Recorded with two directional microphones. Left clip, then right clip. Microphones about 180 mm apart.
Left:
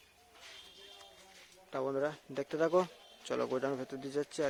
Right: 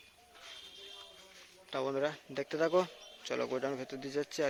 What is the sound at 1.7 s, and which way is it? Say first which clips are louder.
Speech: right 1 dB; 15° left (ahead or behind).